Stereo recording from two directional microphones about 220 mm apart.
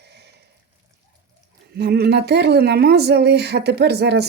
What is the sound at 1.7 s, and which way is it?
Speech, 45° right (ahead or behind).